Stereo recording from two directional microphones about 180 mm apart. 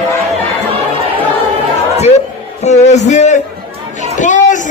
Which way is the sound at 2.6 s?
40° left (ahead or behind).